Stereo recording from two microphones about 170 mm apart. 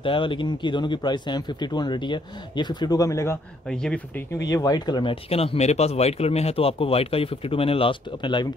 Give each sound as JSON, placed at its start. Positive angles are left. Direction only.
{"t": 0.0, "sound": "speech", "side_deg": 30}
{"t": 3.6, "sound": "speech", "side_deg": 5}
{"t": 4.5, "sound": "speech", "side_deg": 20}